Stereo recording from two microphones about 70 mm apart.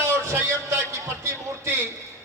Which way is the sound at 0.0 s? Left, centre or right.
Right.